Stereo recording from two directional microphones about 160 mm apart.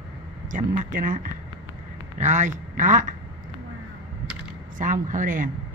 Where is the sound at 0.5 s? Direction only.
55° right (ahead or behind).